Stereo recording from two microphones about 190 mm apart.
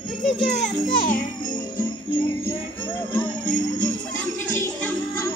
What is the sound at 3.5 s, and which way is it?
Music, 40° left (ahead or behind).